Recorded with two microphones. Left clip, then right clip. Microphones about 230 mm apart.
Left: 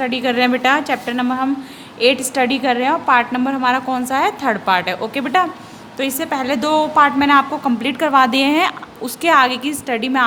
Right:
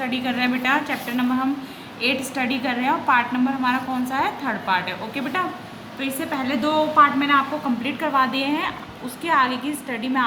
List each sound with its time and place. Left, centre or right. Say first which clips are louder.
0.0 s a woman's voice: left 7 dB; left